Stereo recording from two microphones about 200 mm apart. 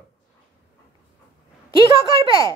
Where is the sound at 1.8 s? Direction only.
25° right (ahead or behind).